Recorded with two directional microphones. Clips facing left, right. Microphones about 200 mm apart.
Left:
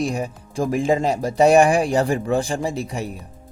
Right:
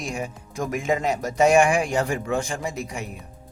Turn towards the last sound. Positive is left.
turn(degrees=35)  # may be behind; listen again after turning